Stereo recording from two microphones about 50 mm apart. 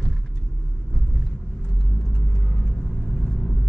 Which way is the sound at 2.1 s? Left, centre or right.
Centre.